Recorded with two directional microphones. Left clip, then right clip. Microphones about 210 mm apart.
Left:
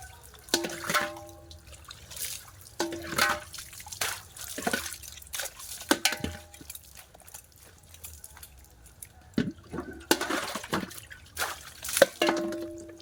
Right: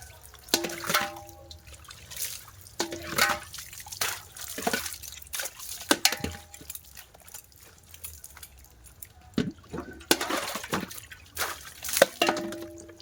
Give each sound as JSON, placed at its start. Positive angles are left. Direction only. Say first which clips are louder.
{"t": 0.5, "sound": "water", "louder": "right 1 dB", "side_deg": -15}
{"t": 2.7, "sound": "music", "louder": "right 1 dB", "side_deg": -20}
{"t": 3.5, "sound": "drip", "louder": "right 1 dB", "side_deg": -5}
{"t": 4.5, "sound": "drip", "louder": "right 1 dB", "side_deg": -15}
{"t": 9.3, "sound": "toilet flush", "louder": "even", "side_deg": -15}
{"t": 11.3, "sound": "drip", "louder": "right 1 dB", "side_deg": -5}
{"t": 11.9, "sound": "dishes", "louder": "even", "side_deg": -15}